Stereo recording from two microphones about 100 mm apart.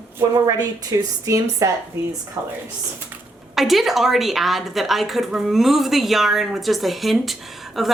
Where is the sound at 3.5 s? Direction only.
Centre (ahead or behind).